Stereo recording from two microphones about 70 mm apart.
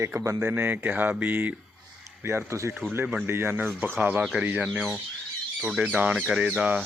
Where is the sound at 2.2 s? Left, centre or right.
Right.